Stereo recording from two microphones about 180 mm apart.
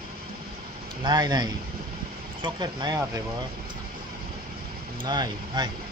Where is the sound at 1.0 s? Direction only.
25° right (ahead or behind).